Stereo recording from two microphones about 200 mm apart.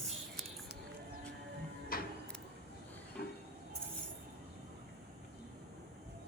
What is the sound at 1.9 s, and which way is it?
Music, 45° left (ahead or behind).